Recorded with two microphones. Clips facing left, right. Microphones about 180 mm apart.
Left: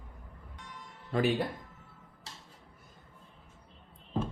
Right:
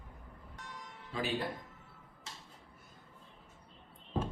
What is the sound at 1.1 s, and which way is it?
Speech, 55° left (ahead or behind).